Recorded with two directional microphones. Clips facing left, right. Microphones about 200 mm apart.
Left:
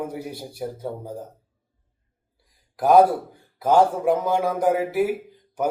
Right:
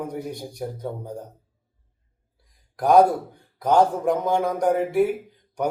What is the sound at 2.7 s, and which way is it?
A man's voice, 5° left (ahead or behind).